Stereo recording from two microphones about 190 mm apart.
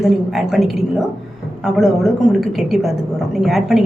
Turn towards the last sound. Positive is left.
turn(degrees=0)  # may be behind; listen again after turning